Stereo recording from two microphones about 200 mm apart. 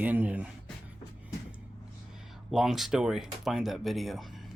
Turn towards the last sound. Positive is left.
turn(degrees=0)  # may be behind; listen again after turning